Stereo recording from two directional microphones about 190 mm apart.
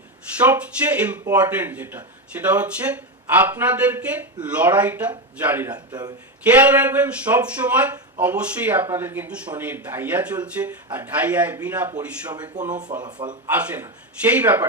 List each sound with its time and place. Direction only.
0.3 s a man's voice: 5° right (ahead or behind)
5.7 s a man's voice: 20° right (ahead or behind)
6.4 s a man's voice: 5° right (ahead or behind)
12.9 s a man's voice: 20° right (ahead or behind)
13.5 s a man's voice: 5° right (ahead or behind)